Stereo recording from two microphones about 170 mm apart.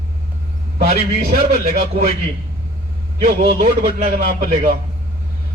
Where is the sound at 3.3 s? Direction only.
55° right (ahead or behind).